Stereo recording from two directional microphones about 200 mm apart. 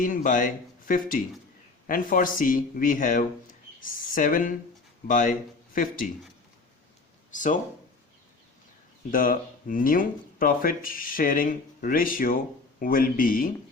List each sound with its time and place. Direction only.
0.0 s speech: 40° left (ahead or behind)
7.3 s speech: 40° left (ahead or behind)
9.0 s speech: 45° left (ahead or behind)